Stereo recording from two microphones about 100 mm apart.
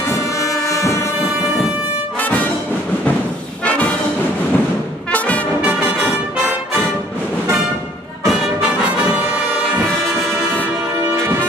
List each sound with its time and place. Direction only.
0.1 s music: 35° left (ahead or behind)
2.1 s brass instrument: 15° left (ahead or behind)
3.6 s brass instrument: 15° left (ahead or behind)
5.1 s brass instrument: 15° left (ahead or behind)
8.3 s brass instrument: 5° right (ahead or behind)
10.0 s music: 5° left (ahead or behind)